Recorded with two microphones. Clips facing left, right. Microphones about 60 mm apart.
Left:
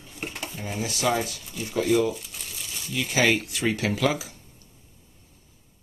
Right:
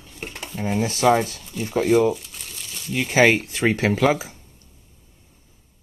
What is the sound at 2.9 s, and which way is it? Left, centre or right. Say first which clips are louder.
Speech: right 6 dB; right.